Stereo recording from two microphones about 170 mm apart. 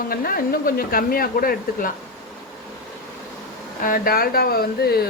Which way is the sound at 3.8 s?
55° left (ahead or behind).